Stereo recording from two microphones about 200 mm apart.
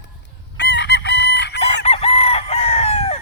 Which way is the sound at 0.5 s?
60° left (ahead or behind).